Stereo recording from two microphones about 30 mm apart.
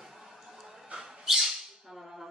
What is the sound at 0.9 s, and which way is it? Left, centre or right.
Bird, centre.